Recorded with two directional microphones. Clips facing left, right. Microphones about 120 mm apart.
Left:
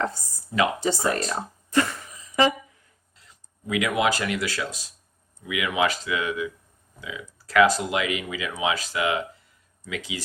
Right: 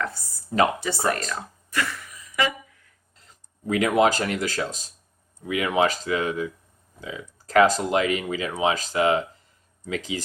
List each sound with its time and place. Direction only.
0.5 s speech: 40° right (ahead or behind)
1.0 s a sound: 30° left (ahead or behind)
3.2 s speech: 40° right (ahead or behind)